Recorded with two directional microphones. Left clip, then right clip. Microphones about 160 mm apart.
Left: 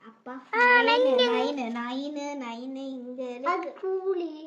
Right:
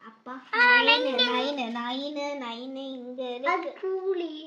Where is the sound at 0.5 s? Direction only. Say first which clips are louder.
Even; 30° left (ahead or behind); by 1.3 s 50° left (ahead or behind).